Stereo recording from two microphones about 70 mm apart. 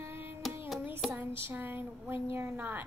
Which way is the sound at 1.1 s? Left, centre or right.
Right.